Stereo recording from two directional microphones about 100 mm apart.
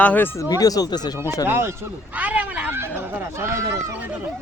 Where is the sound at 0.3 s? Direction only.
40° left (ahead or behind).